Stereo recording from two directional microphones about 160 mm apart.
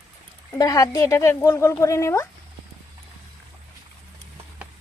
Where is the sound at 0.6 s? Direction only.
20° left (ahead or behind).